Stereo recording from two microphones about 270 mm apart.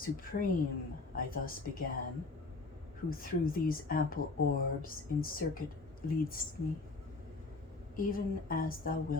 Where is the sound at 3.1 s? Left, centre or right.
Left.